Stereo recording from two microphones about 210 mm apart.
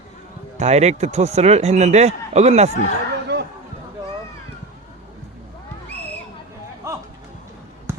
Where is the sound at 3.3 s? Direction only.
55° right (ahead or behind).